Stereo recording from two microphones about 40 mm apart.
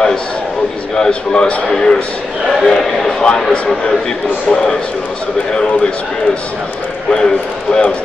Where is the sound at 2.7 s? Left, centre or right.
Centre.